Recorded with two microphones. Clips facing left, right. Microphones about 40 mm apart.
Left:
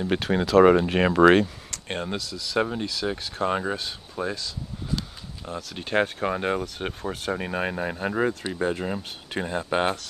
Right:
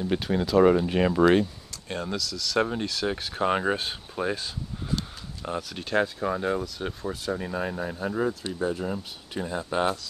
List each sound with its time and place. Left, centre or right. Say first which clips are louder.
0.0 s speech: left 2 dB; left
2.0 s speech: even; left
2.6 s speech: left 1 dB; centre; by 5.6 s right
5.9 s speech: left 2 dB; left